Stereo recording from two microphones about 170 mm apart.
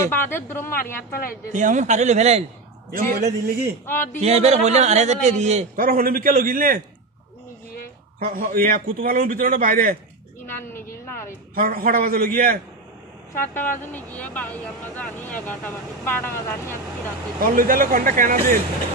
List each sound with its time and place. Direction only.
0.0 s speech: 15° left (ahead or behind)
1.5 s a man's voice: 45° right (ahead or behind)
2.9 s a man's voice: 55° right (ahead or behind)
3.8 s speech: 10° left (ahead or behind)
4.2 s a man's voice: 40° right (ahead or behind)
5.9 s a man's voice: 60° right (ahead or behind)
8.2 s a man's voice: 55° right (ahead or behind)
10.4 s a sound: 15° left (ahead or behind)
11.5 s a man's voice: 55° right (ahead or behind)
13.5 s speech: 10° left (ahead or behind)
17.4 s a man's voice: 55° right (ahead or behind)